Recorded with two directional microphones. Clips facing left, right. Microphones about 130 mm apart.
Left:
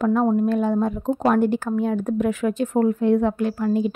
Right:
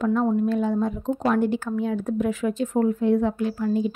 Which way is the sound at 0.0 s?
55° left (ahead or behind).